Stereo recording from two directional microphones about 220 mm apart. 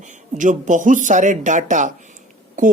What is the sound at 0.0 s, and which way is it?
Speech, 35° right (ahead or behind).